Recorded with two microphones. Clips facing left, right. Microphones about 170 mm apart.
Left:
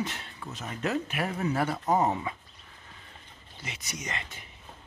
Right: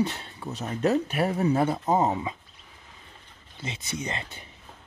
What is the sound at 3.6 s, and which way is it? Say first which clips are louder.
Speech: right 6 dB; 25° right (ahead or behind).